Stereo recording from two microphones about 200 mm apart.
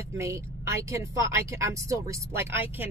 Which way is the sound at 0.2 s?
15° right (ahead or behind).